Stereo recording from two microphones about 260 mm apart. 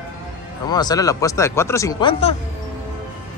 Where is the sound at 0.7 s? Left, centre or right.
Centre.